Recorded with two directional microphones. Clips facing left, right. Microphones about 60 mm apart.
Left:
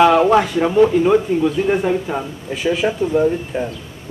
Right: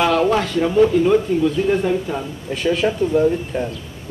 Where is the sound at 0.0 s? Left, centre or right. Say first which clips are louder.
Left 5 dB; centre.